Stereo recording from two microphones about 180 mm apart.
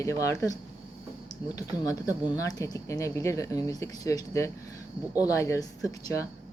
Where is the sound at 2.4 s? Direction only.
20° left (ahead or behind).